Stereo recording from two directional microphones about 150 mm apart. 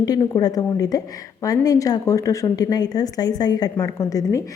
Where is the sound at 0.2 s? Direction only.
25° left (ahead or behind).